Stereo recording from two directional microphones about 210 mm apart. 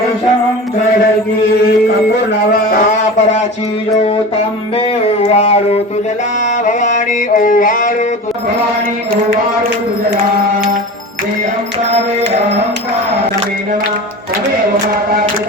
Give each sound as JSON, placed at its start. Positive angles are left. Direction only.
{"t": 5.2, "sound": "music", "side_deg": 30}